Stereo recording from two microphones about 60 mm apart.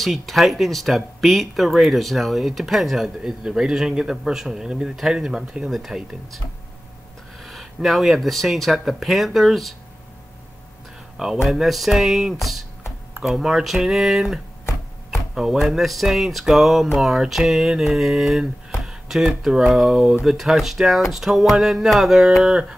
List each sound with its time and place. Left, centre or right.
0.0 s speech: centre
7.4 s speech: centre
11.4 s speech: centre